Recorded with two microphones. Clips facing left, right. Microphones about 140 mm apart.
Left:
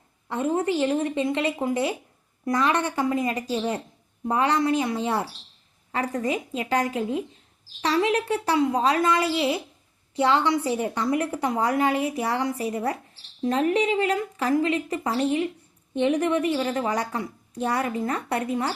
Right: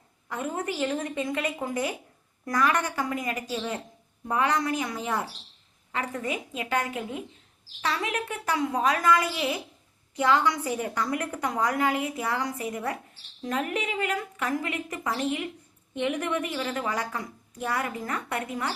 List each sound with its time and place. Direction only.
0.3 s a woman's voice: 30° left (ahead or behind)